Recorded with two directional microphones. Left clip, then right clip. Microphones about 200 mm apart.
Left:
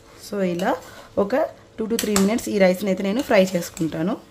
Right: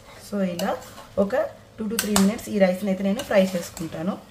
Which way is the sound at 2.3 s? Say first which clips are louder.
Left 3 dB; 55° left (ahead or behind).